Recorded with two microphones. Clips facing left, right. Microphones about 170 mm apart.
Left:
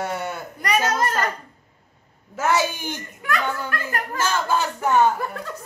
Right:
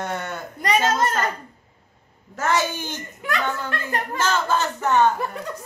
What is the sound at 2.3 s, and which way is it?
Speech, 10° left (ahead or behind).